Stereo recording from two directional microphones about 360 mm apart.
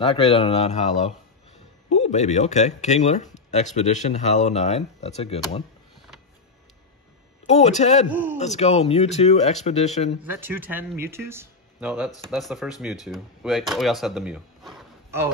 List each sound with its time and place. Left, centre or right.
0.1 s speech: centre
1.9 s speech: centre
7.4 s speech: centre
8.1 s speech: centre
8.4 s speech: centre
10.2 s speech: centre